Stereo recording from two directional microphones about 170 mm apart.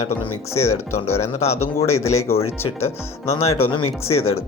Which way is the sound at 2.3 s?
35° left (ahead or behind).